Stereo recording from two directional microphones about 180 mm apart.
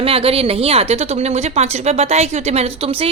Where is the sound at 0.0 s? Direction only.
30° right (ahead or behind).